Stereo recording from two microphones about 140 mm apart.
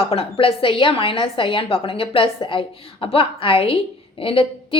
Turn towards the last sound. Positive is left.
turn(degrees=40)  # may be behind; listen again after turning